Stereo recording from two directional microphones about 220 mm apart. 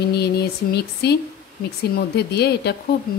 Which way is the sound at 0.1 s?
50° left (ahead or behind).